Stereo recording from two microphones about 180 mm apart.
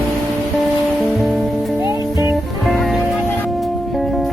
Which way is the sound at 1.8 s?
15° right (ahead or behind).